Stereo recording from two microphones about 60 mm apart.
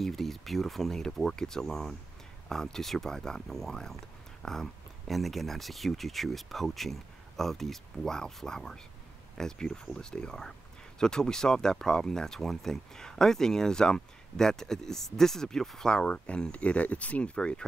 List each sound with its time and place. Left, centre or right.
0.0 s speech: centre